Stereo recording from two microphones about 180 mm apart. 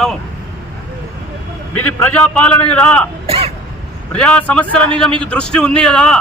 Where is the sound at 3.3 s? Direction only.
30° right (ahead or behind).